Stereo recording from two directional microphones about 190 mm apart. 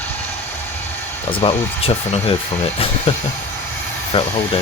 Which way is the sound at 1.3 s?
30° left (ahead or behind).